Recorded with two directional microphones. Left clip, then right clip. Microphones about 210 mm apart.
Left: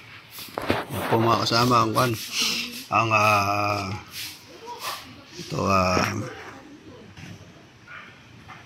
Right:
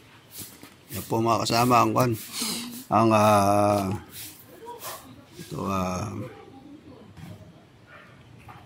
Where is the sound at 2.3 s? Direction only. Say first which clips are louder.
Left 7 dB; 35° right (ahead or behind).